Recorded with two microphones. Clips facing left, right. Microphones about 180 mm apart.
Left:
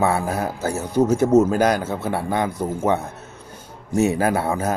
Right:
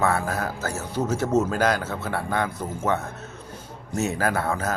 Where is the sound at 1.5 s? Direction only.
10° left (ahead or behind).